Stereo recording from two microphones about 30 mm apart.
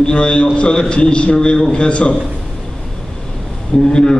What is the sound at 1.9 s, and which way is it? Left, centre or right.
Speech, left.